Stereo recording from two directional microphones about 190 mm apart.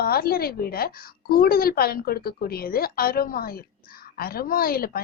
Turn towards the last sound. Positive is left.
turn(degrees=50)  # may be behind; listen again after turning